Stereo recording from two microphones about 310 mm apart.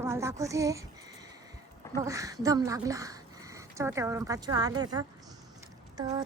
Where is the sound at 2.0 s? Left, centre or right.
Centre.